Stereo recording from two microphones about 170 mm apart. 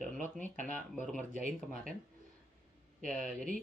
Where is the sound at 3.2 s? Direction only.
50° right (ahead or behind).